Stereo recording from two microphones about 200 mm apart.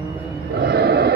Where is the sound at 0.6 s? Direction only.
55° right (ahead or behind).